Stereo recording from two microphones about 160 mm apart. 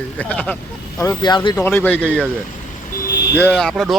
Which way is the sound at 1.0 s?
25° left (ahead or behind).